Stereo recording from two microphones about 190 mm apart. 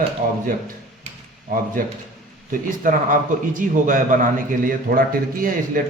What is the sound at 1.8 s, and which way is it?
A man's voice, 45° right (ahead or behind).